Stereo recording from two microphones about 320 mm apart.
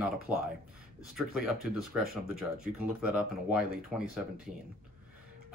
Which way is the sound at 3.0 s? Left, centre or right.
Centre.